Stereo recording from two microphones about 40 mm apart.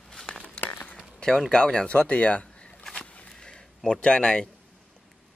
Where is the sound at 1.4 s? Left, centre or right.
Centre.